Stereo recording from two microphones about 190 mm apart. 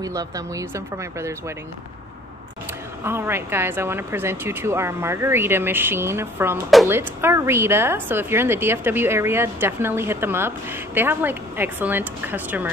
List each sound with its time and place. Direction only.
0.0 s speech: 20° right (ahead or behind)
3.0 s speech: 10° right (ahead or behind)